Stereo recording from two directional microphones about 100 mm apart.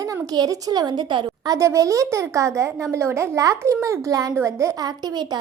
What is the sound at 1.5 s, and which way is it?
A woman's voice, 30° right (ahead or behind).